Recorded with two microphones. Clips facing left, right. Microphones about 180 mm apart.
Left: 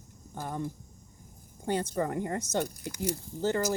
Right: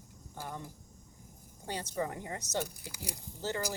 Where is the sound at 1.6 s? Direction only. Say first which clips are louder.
Left 6 dB; 55° left (ahead or behind).